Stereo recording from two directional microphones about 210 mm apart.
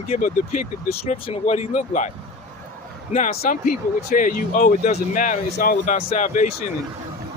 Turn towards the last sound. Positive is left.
turn(degrees=35)  # may be behind; listen again after turning